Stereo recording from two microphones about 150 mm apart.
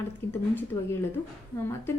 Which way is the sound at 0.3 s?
15° left (ahead or behind).